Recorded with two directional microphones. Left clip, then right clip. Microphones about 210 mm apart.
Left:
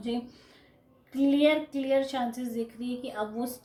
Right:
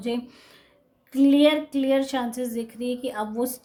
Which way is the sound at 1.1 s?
45° right (ahead or behind).